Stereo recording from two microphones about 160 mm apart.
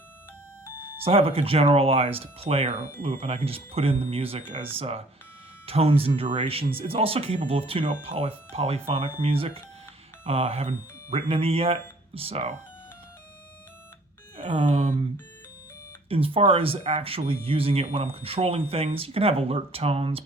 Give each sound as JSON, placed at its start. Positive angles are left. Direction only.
{"t": 1.0, "sound": "speech", "side_deg": -35}
{"t": 14.3, "sound": "speech", "side_deg": -45}
{"t": 16.0, "sound": "speech", "side_deg": -35}